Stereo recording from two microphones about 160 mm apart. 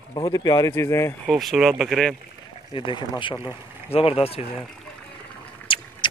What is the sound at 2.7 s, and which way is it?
Speech, 30° left (ahead or behind).